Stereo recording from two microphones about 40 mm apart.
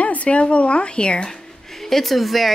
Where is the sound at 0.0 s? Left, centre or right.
Left.